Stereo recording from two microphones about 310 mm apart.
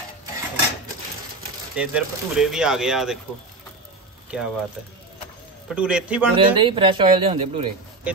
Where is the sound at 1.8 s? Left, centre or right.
Centre.